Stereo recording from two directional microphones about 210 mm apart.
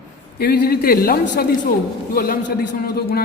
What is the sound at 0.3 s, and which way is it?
A man's voice, 50° left (ahead or behind).